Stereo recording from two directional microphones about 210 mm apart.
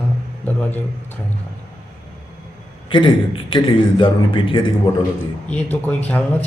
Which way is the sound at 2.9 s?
25° left (ahead or behind).